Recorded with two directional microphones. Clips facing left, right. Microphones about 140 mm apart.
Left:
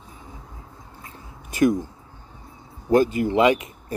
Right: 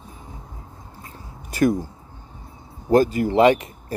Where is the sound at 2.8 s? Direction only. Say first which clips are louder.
Right 1 dB; 35° right (ahead or behind).